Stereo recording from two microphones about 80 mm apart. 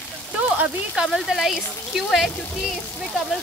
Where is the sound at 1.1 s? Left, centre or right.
Centre.